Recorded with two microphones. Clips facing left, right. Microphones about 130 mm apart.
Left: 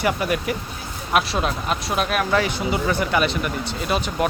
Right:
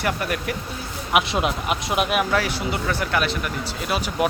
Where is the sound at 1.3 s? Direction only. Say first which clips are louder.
Even; 15° right (ahead or behind).